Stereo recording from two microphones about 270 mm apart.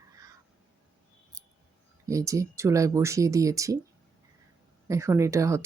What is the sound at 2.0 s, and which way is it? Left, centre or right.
Speech, centre.